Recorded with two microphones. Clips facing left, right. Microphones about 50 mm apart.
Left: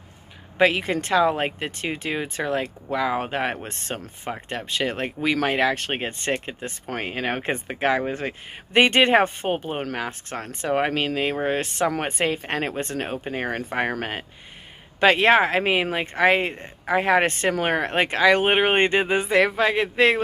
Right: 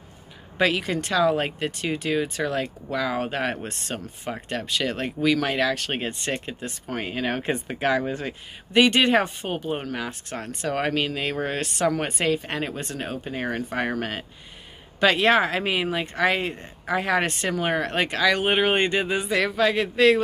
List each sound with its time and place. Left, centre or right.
0.6 s speech: left